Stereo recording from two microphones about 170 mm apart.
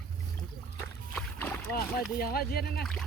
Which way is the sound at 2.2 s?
65° left (ahead or behind).